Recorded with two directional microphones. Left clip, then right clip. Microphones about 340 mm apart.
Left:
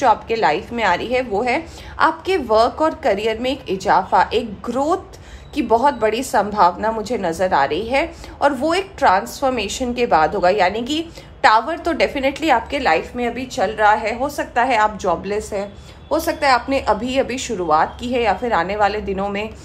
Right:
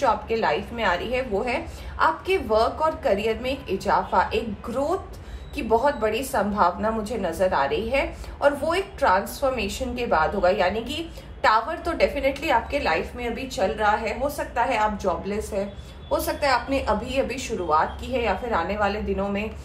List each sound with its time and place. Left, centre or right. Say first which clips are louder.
0.0 s a woman's voice: left 6 dB; left